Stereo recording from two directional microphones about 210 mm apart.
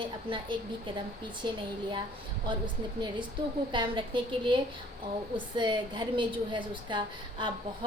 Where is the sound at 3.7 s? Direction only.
25° right (ahead or behind).